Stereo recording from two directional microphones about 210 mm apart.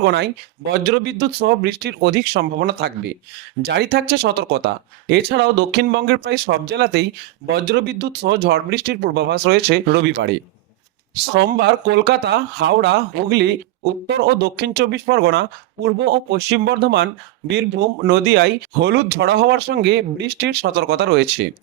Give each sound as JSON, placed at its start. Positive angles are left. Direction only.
{"t": 0.0, "sound": "speech", "side_deg": -55}